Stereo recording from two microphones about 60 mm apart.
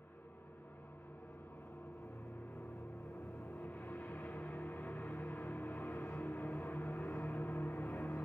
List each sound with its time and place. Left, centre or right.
3.6 s gong: left
5.2 s music: left
7.7 s vehicle: left